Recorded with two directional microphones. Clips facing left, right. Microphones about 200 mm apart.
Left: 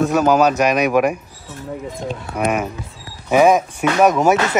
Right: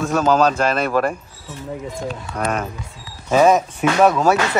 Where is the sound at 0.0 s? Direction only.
15° left (ahead or behind).